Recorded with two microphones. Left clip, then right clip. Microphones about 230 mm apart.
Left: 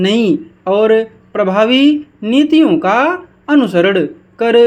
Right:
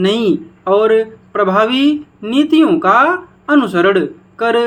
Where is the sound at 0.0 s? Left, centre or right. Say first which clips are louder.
Left 1 dB; left.